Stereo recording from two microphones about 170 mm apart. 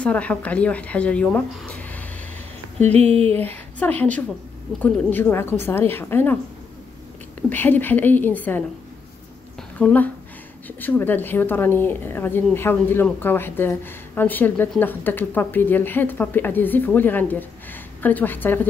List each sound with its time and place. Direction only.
0.0 s a woman's voice: 10° left (ahead or behind)
2.8 s speech: 40° right (ahead or behind)
3.4 s a woman's voice: 10° left (ahead or behind)
7.4 s a woman's voice: 10° left (ahead or behind)
9.8 s a woman's voice: 10° left (ahead or behind)